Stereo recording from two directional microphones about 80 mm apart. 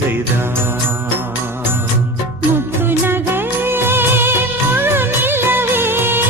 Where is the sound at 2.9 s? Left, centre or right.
Right.